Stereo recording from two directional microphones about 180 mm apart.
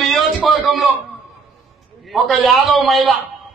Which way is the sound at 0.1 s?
Centre (ahead or behind).